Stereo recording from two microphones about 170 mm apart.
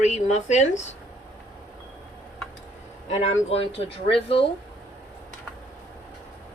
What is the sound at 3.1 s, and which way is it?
Speech, 40° left (ahead or behind).